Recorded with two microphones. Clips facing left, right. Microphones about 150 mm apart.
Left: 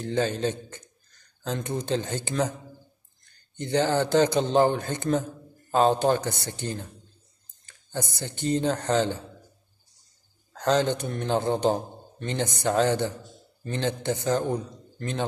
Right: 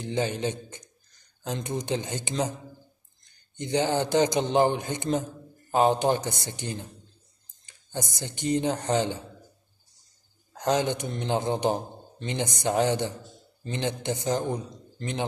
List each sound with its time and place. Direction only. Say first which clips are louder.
0.0 s a man's voice: left 2 dB; 15° right (ahead or behind)
10.5 s a man's voice: left 2 dB; 15° right (ahead or behind)